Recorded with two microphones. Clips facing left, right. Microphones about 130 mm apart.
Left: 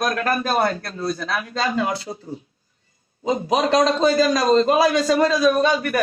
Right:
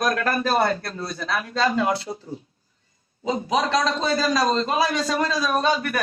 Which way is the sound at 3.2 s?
50° left (ahead or behind).